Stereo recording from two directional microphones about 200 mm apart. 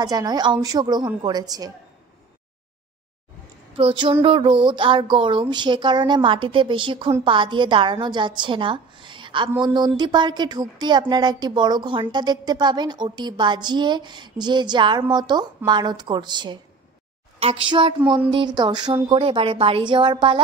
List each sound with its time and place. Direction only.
0.0 s speech: 20° right (ahead or behind)
3.7 s speech: 25° right (ahead or behind)